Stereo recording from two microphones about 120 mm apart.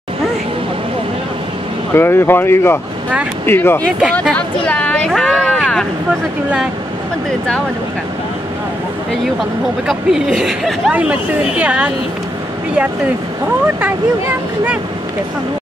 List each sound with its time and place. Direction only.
2.0 s speech: 20° left (ahead or behind)
4.0 s speech: centre (ahead or behind)
9.8 s speech: 5° right (ahead or behind)